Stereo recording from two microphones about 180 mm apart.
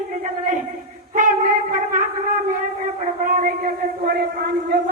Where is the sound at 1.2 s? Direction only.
45° right (ahead or behind).